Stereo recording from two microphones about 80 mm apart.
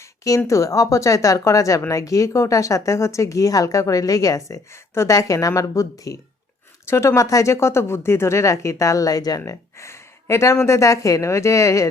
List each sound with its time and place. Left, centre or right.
0.0 s speech: left
6.8 s speech: left
9.5 s speech: left